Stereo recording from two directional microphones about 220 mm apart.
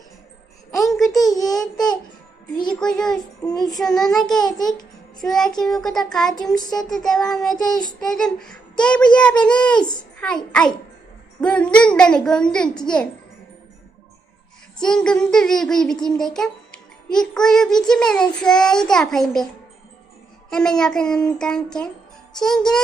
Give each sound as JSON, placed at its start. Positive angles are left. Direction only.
{"t": 0.8, "sound": "a sound", "side_deg": 0}
{"t": 2.8, "sound": "child singing", "side_deg": 0}
{"t": 3.2, "sound": "child singing", "side_deg": 20}
{"t": 3.6, "sound": "child singing", "side_deg": 0}
{"t": 14.8, "sound": "child singing", "side_deg": 5}
{"t": 20.5, "sound": "child singing", "side_deg": 5}